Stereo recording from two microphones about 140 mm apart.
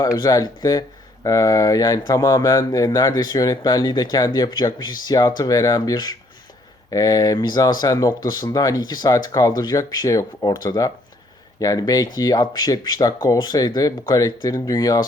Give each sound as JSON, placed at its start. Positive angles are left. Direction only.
{"t": 0.0, "sound": "speech", "side_deg": 25}